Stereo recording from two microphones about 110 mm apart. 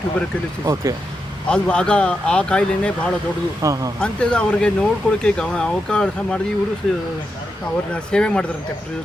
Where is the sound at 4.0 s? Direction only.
10° left (ahead or behind).